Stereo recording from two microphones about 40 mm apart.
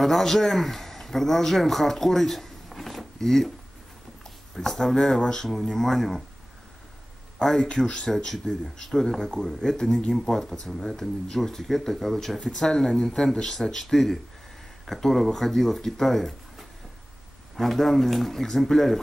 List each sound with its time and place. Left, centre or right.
0.0 s a man's voice: centre
4.6 s speech: centre
7.4 s speech: centre
7.8 s speech: centre